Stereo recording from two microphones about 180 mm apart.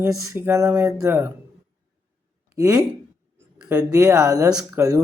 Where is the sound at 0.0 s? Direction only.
15° right (ahead or behind).